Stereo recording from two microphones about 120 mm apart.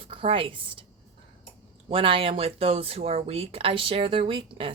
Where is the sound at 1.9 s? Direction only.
50° right (ahead or behind).